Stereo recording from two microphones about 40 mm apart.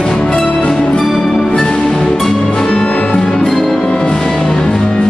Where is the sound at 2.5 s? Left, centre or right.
Centre.